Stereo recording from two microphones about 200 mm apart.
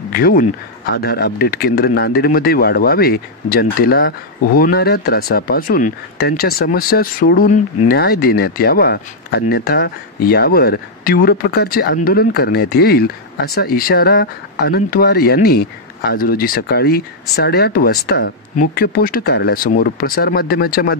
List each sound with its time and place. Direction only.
0.1 s speech: 45° left (ahead or behind)